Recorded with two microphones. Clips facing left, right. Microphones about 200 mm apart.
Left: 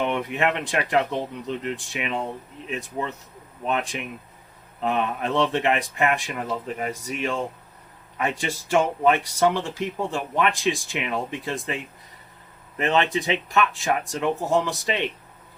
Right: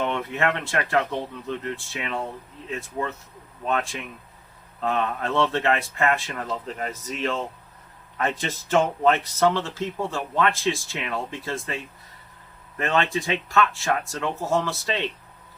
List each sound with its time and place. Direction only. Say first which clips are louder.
0.0 s speech: left 1 dB; 15° left (ahead or behind)